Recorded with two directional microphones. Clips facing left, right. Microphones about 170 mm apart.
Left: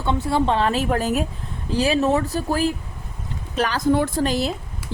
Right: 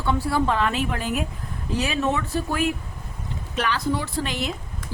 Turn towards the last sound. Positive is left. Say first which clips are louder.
# left 7 dB
turn(degrees=35)  # may be behind; listen again after turning